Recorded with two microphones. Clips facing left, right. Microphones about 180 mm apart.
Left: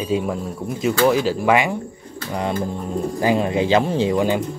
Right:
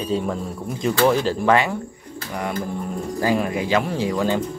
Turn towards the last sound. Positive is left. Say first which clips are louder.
# left 3 dB
turn(degrees=15)  # may be behind; listen again after turning